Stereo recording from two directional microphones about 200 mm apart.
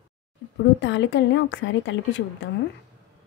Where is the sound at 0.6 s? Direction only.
60° left (ahead or behind).